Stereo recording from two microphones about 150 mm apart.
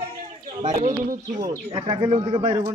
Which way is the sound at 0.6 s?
35° right (ahead or behind).